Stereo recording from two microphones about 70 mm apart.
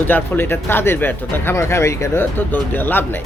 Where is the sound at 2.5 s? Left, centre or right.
Left.